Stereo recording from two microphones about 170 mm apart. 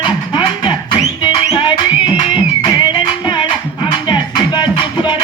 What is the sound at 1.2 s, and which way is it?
Music, 25° left (ahead or behind).